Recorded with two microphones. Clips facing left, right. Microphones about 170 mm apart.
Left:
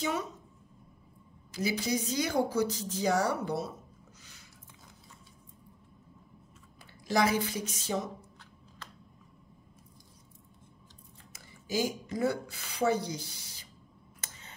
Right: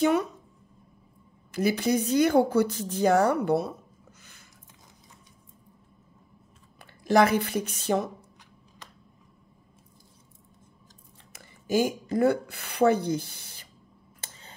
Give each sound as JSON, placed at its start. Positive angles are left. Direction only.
{"t": 0.0, "sound": "speech", "side_deg": -60}
{"t": 1.5, "sound": "speech", "side_deg": -60}
{"t": 4.2, "sound": "a sound", "side_deg": -55}
{"t": 6.8, "sound": "speech", "side_deg": -60}
{"t": 11.3, "sound": "speech", "side_deg": -55}
{"t": 14.2, "sound": "a sound", "side_deg": -30}